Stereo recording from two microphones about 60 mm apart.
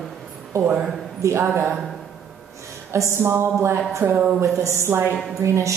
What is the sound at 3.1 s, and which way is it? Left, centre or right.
Speech, right.